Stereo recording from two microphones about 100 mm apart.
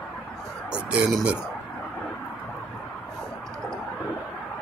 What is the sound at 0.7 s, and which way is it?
Speech, 10° right (ahead or behind).